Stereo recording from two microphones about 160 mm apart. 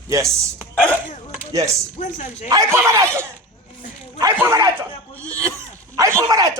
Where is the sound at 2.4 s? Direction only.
20° right (ahead or behind).